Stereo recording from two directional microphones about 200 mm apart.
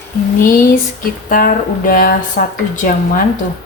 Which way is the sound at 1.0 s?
45° left (ahead or behind).